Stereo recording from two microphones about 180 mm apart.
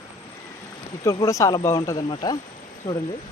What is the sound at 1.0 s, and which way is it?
Speech, 15° left (ahead or behind).